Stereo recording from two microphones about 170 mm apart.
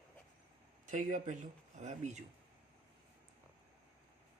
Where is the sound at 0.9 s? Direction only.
50° right (ahead or behind).